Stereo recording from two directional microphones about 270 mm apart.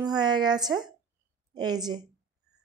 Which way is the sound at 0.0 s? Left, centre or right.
Centre.